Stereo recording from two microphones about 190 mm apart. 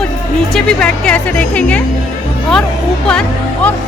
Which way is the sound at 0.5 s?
5° left (ahead or behind).